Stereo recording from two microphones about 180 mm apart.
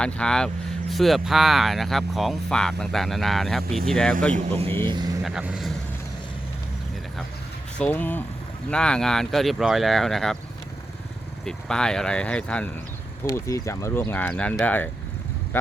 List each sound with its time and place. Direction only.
0.0 s speech: 5° left (ahead or behind)
4.9 s speech: 25° right (ahead or behind)
5.2 s speech: 5° right (ahead or behind)
7.8 s speech: 10° left (ahead or behind)
11.4 s speech: 5° left (ahead or behind)
13.2 s speech: 15° left (ahead or behind)